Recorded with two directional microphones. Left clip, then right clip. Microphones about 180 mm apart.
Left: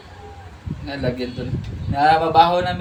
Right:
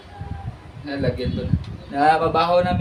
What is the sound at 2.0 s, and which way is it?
Speech, 15° right (ahead or behind).